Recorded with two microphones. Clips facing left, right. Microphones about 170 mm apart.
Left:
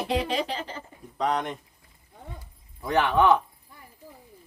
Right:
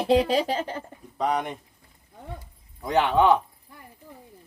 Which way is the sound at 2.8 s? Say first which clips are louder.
Right 1 dB; 20° right (ahead or behind).